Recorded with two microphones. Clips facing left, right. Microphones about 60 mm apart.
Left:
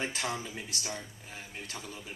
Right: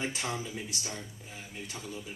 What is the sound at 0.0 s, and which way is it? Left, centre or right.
A man's voice, left.